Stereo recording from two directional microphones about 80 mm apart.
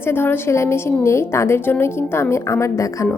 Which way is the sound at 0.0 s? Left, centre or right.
Left.